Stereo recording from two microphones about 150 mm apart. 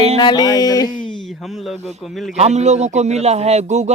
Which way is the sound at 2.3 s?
45° right (ahead or behind).